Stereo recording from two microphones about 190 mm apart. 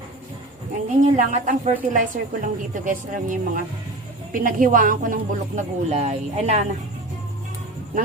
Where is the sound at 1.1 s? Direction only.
40° right (ahead or behind).